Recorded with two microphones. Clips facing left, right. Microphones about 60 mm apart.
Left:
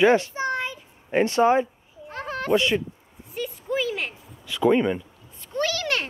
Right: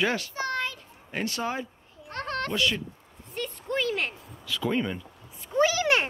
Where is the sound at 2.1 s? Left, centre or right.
Centre.